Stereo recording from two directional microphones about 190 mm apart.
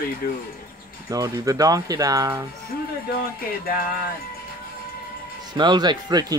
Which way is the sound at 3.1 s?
50° left (ahead or behind).